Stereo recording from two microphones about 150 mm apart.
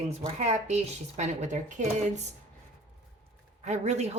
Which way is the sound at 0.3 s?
50° right (ahead or behind).